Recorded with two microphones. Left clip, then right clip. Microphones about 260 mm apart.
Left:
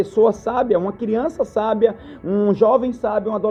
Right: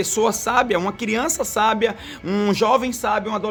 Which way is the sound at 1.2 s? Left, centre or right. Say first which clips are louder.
Left 3 dB; right.